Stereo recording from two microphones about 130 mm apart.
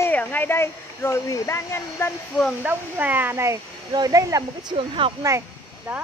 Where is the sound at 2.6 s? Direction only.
15° right (ahead or behind).